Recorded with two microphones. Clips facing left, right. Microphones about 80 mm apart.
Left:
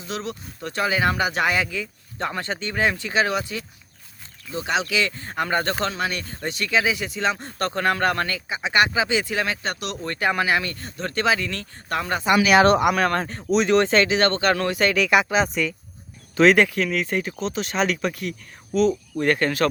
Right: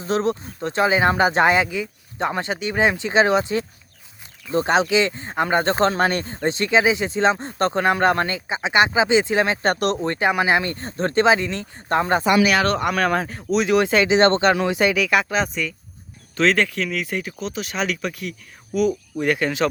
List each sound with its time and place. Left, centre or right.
0.0 s speech: right
4.5 s speech: right
4.9 s speech: right
9.6 s speech: right
10.0 s speech: right
12.5 s speech: left
12.8 s speech: centre
14.1 s speech: right
14.5 s speech: centre
14.9 s speech: centre
18.7 s speech: centre